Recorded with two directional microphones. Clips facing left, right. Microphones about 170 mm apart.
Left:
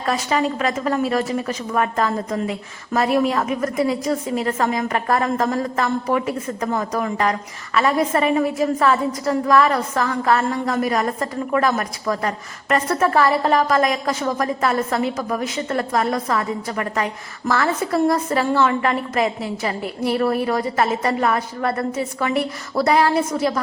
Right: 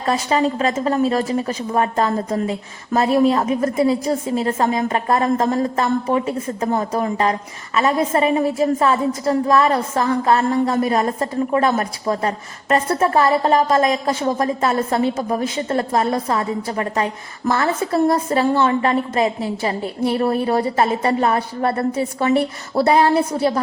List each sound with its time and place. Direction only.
0.0 s speech: 30° right (ahead or behind)